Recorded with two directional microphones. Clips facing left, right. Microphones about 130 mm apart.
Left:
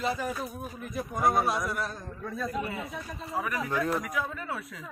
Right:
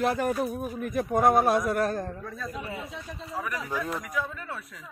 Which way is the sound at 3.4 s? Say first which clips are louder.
Left 2 dB; 10° left (ahead or behind).